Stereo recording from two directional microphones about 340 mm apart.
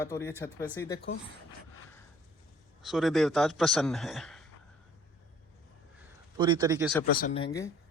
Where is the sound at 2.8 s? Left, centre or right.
Centre.